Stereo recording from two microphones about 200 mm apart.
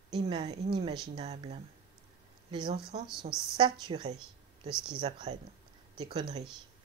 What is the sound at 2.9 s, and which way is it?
Speech, 25° right (ahead or behind).